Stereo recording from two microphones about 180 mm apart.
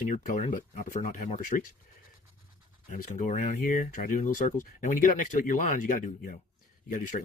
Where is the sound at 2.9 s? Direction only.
45° left (ahead or behind).